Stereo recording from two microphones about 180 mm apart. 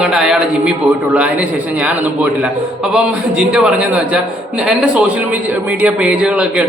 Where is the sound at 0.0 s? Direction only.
5° right (ahead or behind).